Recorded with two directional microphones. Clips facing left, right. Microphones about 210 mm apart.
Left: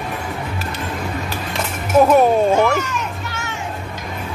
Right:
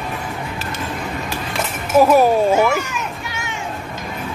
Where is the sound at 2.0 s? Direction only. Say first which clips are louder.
Even; 5° right (ahead or behind).